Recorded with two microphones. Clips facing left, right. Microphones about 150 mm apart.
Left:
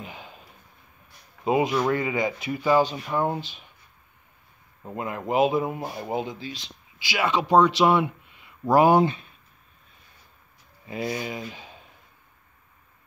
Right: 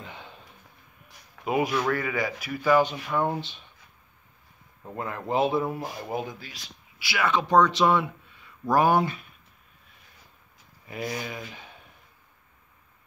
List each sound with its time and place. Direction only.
0.0 s a sound: 15° left (ahead or behind)
1.4 s speech: 25° left (ahead or behind)
4.8 s speech: 15° left (ahead or behind)
10.9 s speech: 25° left (ahead or behind)